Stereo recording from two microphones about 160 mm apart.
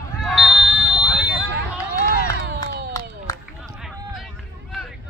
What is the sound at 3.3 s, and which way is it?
Run, 20° left (ahead or behind).